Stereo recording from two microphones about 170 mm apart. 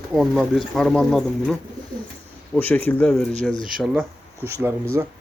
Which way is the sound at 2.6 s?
10° left (ahead or behind).